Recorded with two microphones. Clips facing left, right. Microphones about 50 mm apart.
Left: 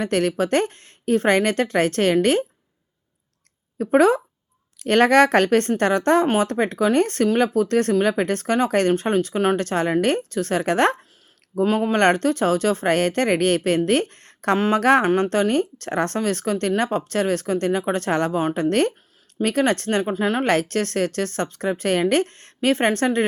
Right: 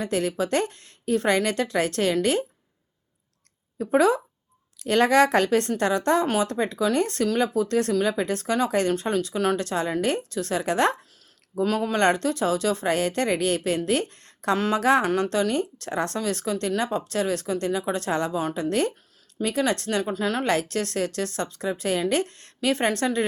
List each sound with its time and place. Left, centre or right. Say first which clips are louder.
0.0 s speech: left 4 dB; left
3.8 s speech: left 4 dB; left
11.6 s speech: left 4 dB; left
20.5 s speech: left 4 dB; left